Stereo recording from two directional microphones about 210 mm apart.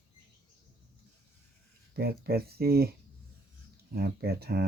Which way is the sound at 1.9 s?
45° right (ahead or behind).